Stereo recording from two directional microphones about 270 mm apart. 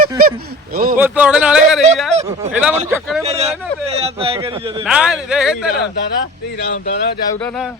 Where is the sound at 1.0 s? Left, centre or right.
Centre.